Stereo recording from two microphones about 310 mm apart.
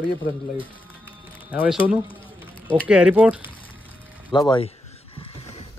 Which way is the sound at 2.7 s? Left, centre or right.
Centre.